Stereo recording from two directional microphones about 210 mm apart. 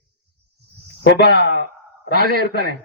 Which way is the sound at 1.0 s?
50° left (ahead or behind).